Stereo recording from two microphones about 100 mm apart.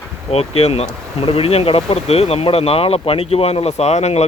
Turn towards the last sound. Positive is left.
turn(degrees=90)